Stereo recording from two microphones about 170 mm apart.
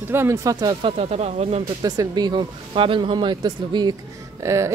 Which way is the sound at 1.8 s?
25° right (ahead or behind).